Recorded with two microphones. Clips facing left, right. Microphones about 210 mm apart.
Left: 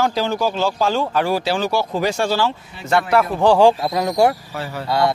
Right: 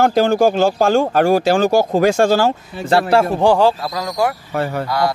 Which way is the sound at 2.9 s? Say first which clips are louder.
Right 3 dB; 30° right (ahead or behind).